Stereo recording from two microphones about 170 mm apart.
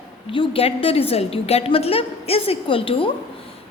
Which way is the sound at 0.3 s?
35° left (ahead or behind).